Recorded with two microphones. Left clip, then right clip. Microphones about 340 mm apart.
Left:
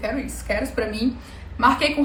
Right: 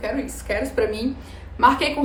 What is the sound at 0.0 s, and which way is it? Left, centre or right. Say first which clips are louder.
A woman's voice: even; centre.